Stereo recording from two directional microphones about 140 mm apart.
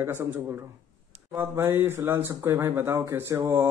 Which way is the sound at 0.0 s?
15° right (ahead or behind).